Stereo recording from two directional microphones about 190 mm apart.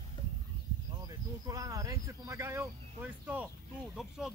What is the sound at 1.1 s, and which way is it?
Speech, 20° right (ahead or behind).